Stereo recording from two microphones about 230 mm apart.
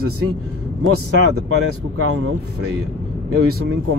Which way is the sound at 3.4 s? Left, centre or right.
Right.